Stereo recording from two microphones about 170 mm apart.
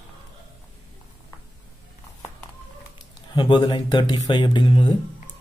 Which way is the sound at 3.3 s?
25° left (ahead or behind).